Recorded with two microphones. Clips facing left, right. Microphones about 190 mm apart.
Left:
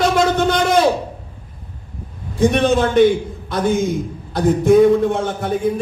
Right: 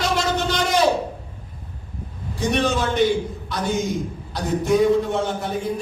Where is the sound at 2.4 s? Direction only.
55° left (ahead or behind).